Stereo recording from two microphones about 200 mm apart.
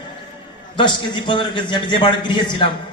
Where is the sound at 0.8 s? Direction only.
25° left (ahead or behind).